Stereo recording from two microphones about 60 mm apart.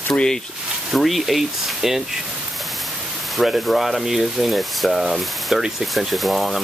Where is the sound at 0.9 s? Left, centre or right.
Centre.